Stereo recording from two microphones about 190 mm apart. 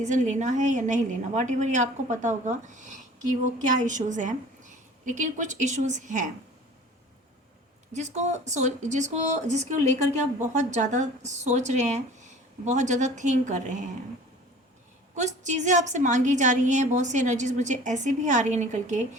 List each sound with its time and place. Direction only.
0.0 s a woman's voice: 40° right (ahead or behind)
7.9 s a woman's voice: 40° right (ahead or behind)
15.1 s a woman's voice: 40° right (ahead or behind)